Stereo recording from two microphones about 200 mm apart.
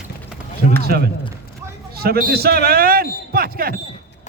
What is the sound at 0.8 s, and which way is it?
Speech, 50° right (ahead or behind).